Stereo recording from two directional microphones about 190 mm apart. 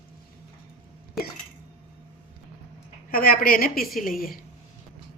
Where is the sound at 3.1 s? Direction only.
50° left (ahead or behind).